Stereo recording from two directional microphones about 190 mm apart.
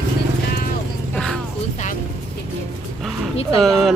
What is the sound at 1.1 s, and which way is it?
Music, centre (ahead or behind).